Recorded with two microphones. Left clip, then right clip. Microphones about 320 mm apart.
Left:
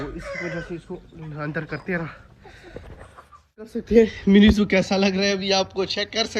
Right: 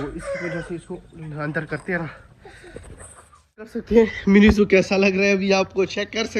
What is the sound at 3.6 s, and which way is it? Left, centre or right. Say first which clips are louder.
A man's voice: even; centre.